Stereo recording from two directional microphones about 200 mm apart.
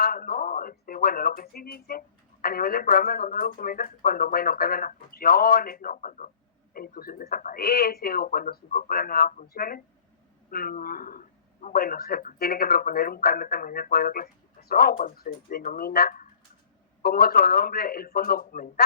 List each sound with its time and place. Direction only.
0.0 s speech: 50° left (ahead or behind)